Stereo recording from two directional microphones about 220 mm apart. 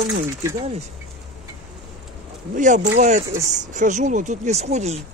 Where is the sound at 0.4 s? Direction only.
15° right (ahead or behind).